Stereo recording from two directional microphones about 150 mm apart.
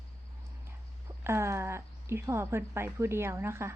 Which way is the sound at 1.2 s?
15° right (ahead or behind).